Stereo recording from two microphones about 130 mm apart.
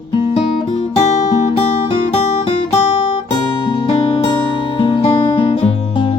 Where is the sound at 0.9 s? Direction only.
60° left (ahead or behind).